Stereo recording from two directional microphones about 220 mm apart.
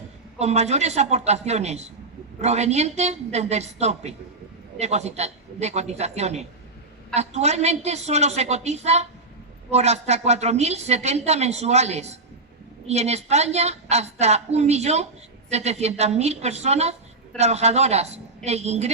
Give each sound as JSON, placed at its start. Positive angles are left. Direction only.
{"t": 0.3, "sound": "a woman's voice", "side_deg": -30}